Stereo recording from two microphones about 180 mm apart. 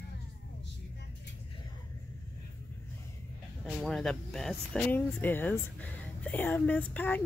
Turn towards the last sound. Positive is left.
turn(degrees=10)  # may be behind; listen again after turning